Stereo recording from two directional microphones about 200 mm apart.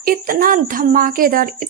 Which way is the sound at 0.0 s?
45° right (ahead or behind).